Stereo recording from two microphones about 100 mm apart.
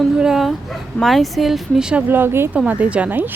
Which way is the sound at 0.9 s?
Centre (ahead or behind).